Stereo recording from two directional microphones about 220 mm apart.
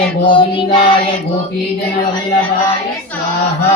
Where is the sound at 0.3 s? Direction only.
25° left (ahead or behind).